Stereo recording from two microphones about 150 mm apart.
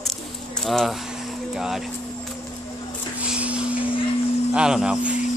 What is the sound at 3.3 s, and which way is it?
Vacuum cleaner, 10° right (ahead or behind).